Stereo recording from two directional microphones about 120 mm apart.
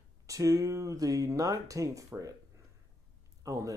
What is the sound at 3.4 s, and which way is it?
Speech, 25° right (ahead or behind).